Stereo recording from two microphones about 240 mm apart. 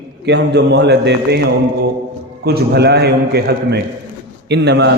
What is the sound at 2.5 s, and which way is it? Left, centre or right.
Speech, right.